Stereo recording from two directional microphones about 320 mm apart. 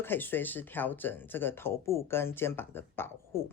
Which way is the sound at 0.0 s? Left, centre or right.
Centre.